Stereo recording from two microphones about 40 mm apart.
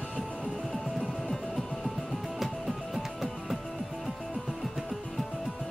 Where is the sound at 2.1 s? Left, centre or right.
Centre.